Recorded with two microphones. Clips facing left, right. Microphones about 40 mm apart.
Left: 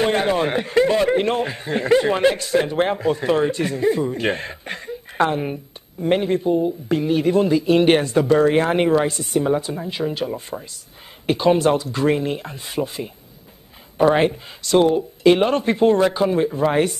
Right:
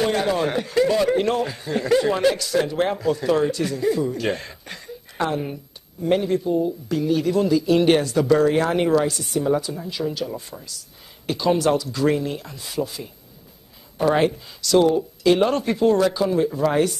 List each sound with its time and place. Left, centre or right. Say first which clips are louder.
0.0 s speech: left 2 dB; left